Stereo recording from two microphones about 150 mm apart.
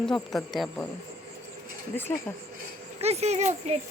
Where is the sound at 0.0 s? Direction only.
Centre (ahead or behind).